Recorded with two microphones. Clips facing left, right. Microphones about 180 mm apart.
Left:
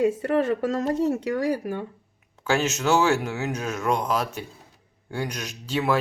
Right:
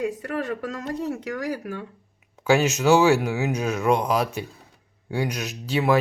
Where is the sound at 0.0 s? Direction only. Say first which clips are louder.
Left 6 dB; 25° left (ahead or behind).